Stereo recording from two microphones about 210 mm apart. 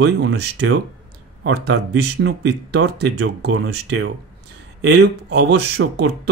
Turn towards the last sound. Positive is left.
turn(degrees=-50)  # may be behind; listen again after turning